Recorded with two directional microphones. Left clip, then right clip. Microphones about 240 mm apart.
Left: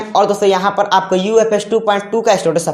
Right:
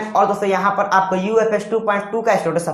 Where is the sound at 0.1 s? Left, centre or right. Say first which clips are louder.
Left 4 dB; left.